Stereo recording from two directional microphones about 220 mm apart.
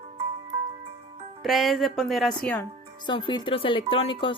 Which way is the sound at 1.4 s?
Centre (ahead or behind).